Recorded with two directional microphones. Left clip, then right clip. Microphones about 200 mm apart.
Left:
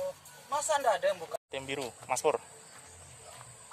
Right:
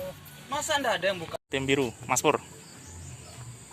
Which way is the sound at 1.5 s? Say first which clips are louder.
Right 14 dB; centre (ahead or behind).